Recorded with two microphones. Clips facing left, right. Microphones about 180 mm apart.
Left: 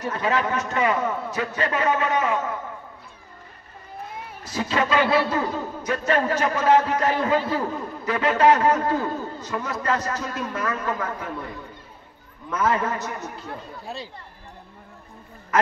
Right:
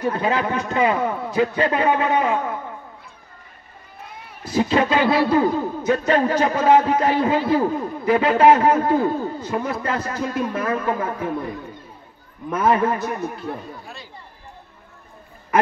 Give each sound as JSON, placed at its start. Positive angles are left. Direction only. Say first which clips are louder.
{"t": 0.1, "sound": "speech", "louder": "right 2 dB", "side_deg": -25}
{"t": 4.5, "sound": "speech", "louder": "right 5 dB", "side_deg": -25}
{"t": 12.4, "sound": "speech", "louder": "right 5 dB", "side_deg": -30}